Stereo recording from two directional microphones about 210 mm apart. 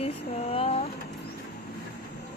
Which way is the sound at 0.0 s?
30° left (ahead or behind).